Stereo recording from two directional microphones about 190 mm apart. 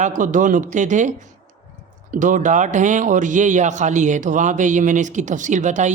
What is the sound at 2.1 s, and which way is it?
Speech, 40° right (ahead or behind).